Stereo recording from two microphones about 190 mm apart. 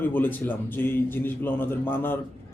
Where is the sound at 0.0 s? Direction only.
10° left (ahead or behind).